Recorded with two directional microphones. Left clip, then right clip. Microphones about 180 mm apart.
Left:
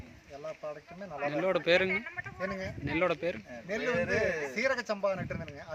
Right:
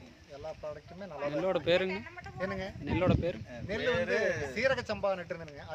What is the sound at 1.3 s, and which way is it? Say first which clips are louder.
Speech: left 2 dB; 5° right (ahead or behind).